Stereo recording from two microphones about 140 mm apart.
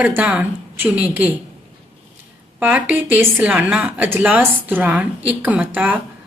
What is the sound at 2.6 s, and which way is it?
A woman's voice, 10° right (ahead or behind).